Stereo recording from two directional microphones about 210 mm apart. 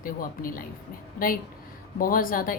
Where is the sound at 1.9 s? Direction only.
40° left (ahead or behind).